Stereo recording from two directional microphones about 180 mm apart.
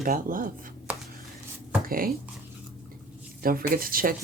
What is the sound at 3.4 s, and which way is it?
Speech, 55° right (ahead or behind).